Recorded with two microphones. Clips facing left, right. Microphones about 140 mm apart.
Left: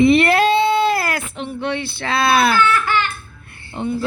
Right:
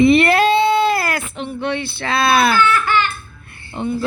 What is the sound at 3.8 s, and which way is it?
Speech, 65° right (ahead or behind).